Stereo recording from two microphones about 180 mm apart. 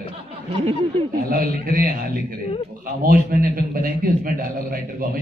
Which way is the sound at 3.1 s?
55° right (ahead or behind).